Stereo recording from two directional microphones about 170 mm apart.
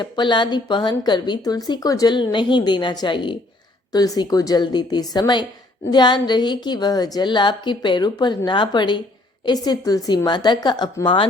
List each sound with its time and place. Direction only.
0.0 s a woman's voice: 25° left (ahead or behind)